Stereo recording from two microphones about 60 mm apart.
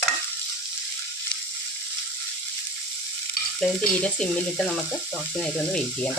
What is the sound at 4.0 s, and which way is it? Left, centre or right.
Speech, centre.